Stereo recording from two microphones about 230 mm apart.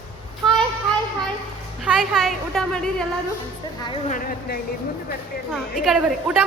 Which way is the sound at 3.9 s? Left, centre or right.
Left.